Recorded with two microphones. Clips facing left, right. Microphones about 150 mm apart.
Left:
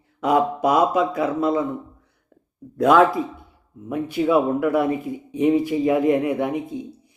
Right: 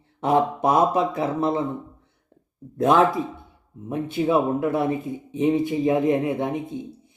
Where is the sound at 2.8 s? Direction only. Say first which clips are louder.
Left 3 dB; 25° right (ahead or behind).